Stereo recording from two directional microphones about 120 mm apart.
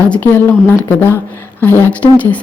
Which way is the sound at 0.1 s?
15° left (ahead or behind).